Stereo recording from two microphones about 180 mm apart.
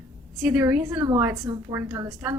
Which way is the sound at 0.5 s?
15° right (ahead or behind).